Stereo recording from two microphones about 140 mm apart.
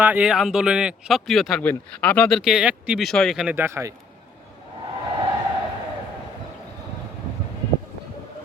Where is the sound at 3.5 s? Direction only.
20° right (ahead or behind).